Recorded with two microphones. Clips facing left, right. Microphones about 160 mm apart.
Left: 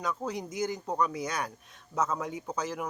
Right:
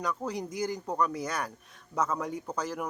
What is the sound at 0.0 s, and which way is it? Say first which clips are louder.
Speech: right 1 dB; 5° left (ahead or behind).